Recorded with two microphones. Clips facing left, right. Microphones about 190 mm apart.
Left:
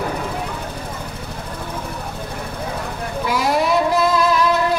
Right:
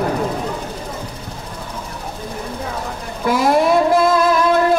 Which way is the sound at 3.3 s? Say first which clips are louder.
Right 5 dB; 50° right (ahead or behind).